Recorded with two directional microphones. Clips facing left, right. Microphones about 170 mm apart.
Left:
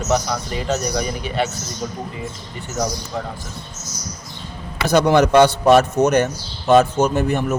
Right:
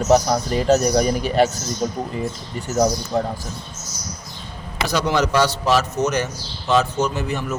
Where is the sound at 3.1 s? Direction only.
40° right (ahead or behind).